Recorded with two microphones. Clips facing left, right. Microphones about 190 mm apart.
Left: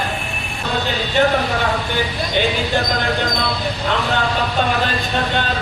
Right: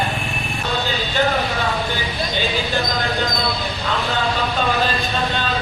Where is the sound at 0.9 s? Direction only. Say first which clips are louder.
Left 5 dB; 20° left (ahead or behind).